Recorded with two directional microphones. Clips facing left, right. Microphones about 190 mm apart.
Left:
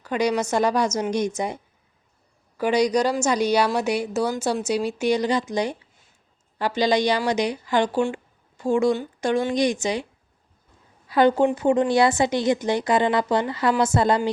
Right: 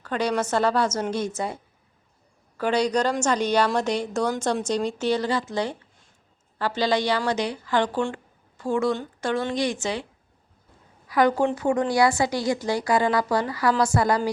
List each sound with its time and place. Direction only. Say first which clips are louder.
0.0 s speech: left 2 dB; 10° left (ahead or behind)
2.6 s speech: left 2 dB; 10° left (ahead or behind)
11.1 s speech: left 3 dB; 25° left (ahead or behind)